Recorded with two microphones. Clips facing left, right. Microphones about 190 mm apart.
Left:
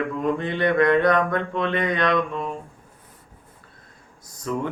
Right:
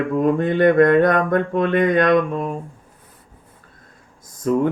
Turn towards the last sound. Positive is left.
turn(degrees=-50)  # may be behind; listen again after turning